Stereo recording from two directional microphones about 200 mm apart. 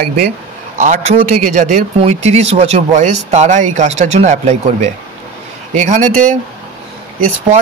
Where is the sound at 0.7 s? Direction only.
40° right (ahead or behind).